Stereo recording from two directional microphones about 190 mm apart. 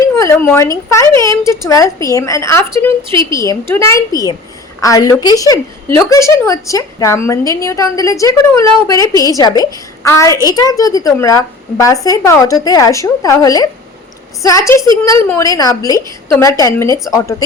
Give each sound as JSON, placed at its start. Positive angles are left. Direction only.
{"t": 0.2, "sound": "a woman's voice", "side_deg": 15}